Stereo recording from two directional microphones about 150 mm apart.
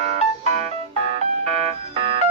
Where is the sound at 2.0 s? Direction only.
40° right (ahead or behind).